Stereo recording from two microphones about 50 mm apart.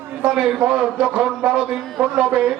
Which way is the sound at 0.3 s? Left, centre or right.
Centre.